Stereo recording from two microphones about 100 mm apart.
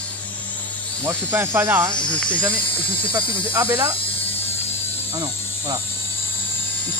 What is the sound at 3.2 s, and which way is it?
Speech, 30° right (ahead or behind).